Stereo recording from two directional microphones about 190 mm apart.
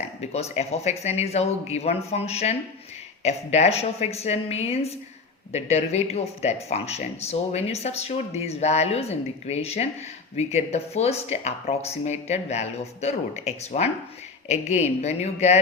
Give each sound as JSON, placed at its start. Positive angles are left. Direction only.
{"t": 0.0, "sound": "speech", "side_deg": 35}